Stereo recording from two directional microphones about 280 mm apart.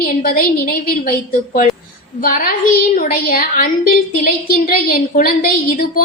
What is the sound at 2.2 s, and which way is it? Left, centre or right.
A woman's voice, left.